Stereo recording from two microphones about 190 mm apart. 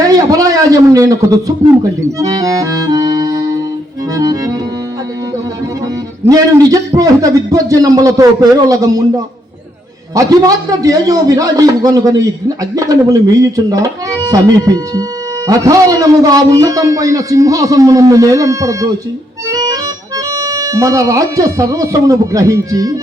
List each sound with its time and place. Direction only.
0.0 s a sound: 20° right (ahead or behind)
2.1 s a man's voice: 20° right (ahead or behind)
6.2 s a man's voice: 20° right (ahead or behind)